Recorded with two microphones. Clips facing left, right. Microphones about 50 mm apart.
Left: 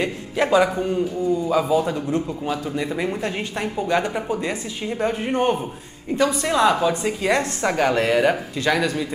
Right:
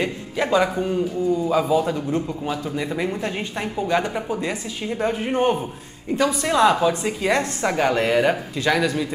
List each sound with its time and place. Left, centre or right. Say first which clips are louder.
0.0 s a man's voice: left 2 dB; centre
6.1 s a woman's voice: left 1 dB; centre
6.4 s a man's voice: right 3 dB; centre